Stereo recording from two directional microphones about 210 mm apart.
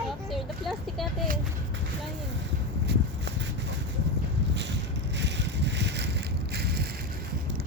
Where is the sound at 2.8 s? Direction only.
55° right (ahead or behind).